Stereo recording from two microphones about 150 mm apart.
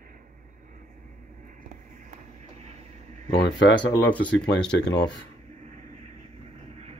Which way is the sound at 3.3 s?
90° left.